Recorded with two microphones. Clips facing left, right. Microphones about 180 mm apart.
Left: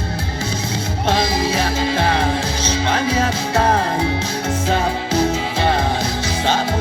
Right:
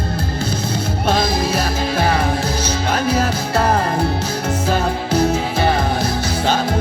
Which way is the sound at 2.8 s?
60° right (ahead or behind).